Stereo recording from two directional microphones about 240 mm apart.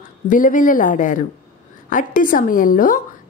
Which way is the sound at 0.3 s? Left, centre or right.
Left.